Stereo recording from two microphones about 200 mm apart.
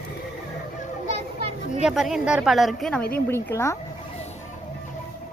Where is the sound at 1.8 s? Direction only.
Centre (ahead or behind); by 3.8 s 15° left (ahead or behind).